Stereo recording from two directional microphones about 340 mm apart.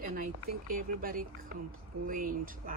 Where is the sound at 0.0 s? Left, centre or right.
Right.